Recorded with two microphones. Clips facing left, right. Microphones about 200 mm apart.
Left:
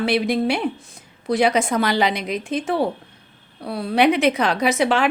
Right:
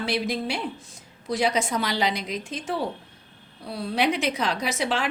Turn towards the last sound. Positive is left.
turn(degrees=60)  # may be behind; listen again after turning